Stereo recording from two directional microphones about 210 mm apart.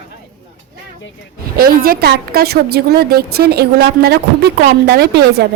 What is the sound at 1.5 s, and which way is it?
A woman's voice, 45° right (ahead or behind).